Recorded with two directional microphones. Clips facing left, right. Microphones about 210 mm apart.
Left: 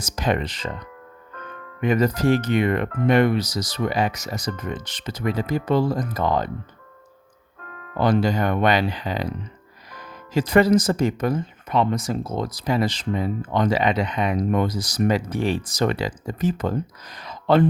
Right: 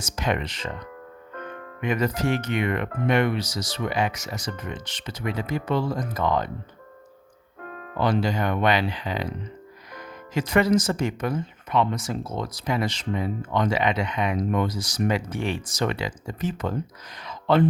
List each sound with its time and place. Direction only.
0.0 s speech: 35° left (ahead or behind)
1.8 s speech: 40° left (ahead or behind)
7.9 s speech: 45° left (ahead or behind)